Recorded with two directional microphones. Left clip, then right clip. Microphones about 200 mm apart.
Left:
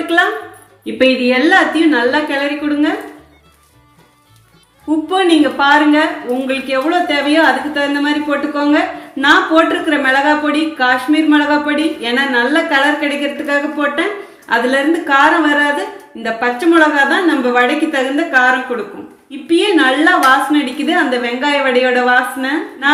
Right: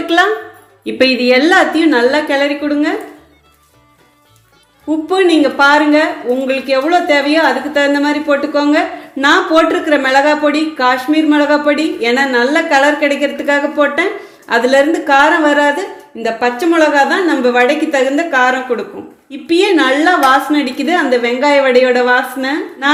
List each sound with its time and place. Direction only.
0.9 s a woman's voice: 60° right (ahead or behind)
5.0 s a woman's voice: 40° right (ahead or behind)